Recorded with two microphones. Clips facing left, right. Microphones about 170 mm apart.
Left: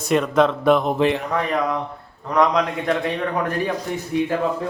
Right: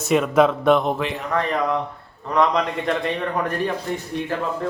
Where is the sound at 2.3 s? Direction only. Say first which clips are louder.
Left 1 dB; centre (ahead or behind).